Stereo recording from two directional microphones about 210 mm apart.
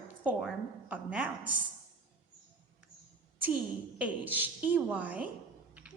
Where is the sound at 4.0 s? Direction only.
5° right (ahead or behind).